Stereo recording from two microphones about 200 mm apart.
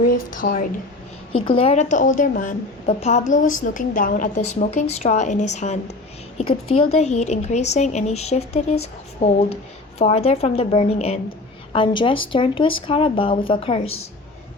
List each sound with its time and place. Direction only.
0.4 s a woman's voice: 45° left (ahead or behind)
1.3 s speech: 30° left (ahead or behind)